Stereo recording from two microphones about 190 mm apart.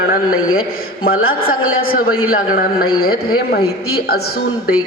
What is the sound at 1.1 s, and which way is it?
Speech, 90° left.